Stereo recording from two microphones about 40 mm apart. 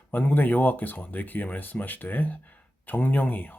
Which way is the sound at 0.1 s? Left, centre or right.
Left.